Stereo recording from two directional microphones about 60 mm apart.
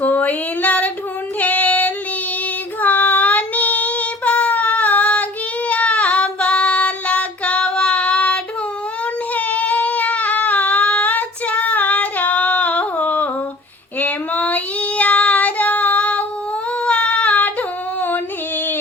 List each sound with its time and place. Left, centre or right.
0.0 s a sound: left
1.4 s female singing: left
2.8 s child singing: left
9.3 s baby cry: left
14.0 s child singing: left
16.8 s a sound: left